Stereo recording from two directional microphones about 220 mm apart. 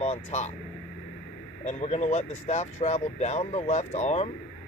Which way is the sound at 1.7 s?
30° left (ahead or behind).